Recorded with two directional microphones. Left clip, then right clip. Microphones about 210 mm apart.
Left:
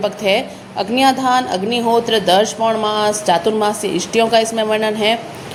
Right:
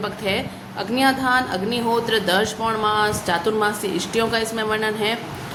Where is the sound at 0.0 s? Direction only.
20° left (ahead or behind).